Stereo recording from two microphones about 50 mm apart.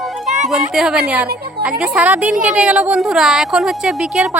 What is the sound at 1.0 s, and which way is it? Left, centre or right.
A woman's voice, right.